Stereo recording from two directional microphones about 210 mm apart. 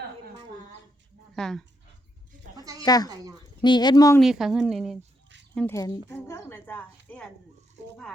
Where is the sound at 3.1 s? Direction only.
15° right (ahead or behind).